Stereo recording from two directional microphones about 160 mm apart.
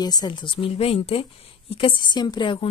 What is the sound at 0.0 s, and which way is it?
A woman's voice, 25° left (ahead or behind).